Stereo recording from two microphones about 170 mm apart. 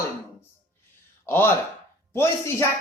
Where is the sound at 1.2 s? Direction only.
15° left (ahead or behind).